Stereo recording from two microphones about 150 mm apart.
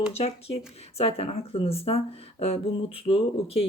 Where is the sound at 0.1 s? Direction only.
40° left (ahead or behind).